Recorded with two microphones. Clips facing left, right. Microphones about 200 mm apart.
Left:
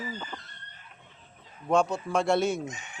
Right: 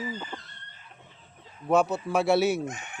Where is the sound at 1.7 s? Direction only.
5° right (ahead or behind).